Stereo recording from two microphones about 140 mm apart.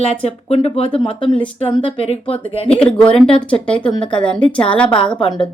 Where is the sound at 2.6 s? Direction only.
10° left (ahead or behind).